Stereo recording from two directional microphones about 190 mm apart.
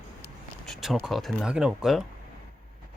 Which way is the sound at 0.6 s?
Centre (ahead or behind).